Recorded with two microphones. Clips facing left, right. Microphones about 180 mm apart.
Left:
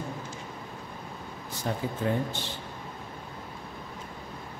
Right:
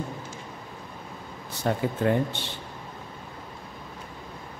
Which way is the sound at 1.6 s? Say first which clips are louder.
Right 5 dB; 65° right (ahead or behind).